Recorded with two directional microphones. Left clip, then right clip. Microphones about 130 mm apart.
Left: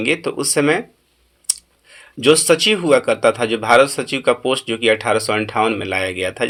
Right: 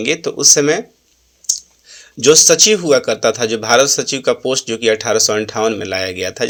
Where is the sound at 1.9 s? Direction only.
25° right (ahead or behind).